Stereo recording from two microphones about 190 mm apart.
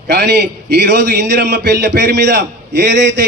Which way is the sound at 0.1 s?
60° right (ahead or behind).